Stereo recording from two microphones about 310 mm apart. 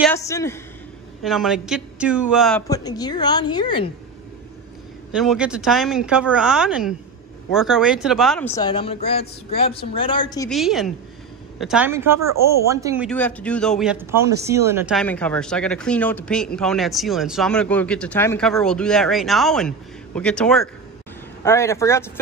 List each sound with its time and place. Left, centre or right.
0.1 s a woman's voice: centre
2.7 s a woman's voice: centre
5.1 s speech: centre
8.5 s a woman's voice: centre
10.5 s speech: centre
13.1 s a woman's voice: centre